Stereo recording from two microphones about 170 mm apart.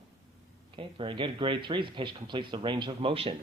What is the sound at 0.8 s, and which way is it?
Speech, 30° right (ahead or behind).